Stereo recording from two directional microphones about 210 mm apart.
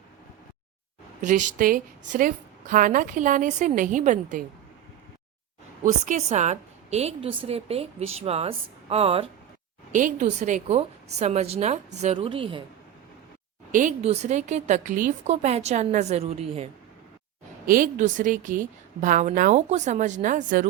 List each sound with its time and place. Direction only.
1.2 s a woman's voice: 35° right (ahead or behind)
5.8 s a woman's voice: 35° right (ahead or behind)
13.7 s a woman's voice: 35° right (ahead or behind)
17.7 s a woman's voice: 40° right (ahead or behind)